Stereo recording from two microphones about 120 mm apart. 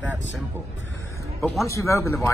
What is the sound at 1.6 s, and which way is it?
Speech, 25° left (ahead or behind).